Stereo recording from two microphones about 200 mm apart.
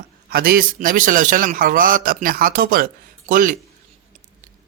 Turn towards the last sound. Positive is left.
turn(degrees=-40)  # may be behind; listen again after turning